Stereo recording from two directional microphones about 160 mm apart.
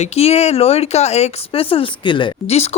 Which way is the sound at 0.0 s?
40° left (ahead or behind).